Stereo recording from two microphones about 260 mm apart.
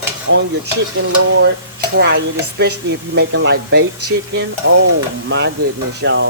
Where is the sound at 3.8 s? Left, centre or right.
Right.